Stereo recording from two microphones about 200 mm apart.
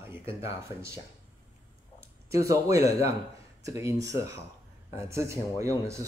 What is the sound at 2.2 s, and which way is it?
Speech, 15° right (ahead or behind).